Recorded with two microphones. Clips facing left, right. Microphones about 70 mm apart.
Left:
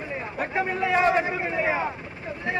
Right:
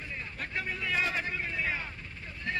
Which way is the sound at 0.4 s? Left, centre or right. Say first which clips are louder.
Left 11 dB; left.